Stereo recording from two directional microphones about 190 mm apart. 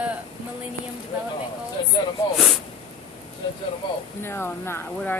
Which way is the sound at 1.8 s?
25° left (ahead or behind).